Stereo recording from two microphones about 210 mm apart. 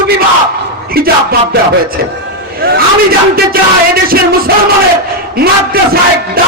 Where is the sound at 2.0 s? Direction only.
50° right (ahead or behind).